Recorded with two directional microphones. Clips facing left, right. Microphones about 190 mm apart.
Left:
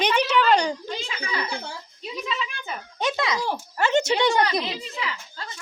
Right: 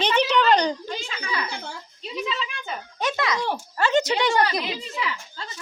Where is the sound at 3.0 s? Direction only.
25° left (ahead or behind).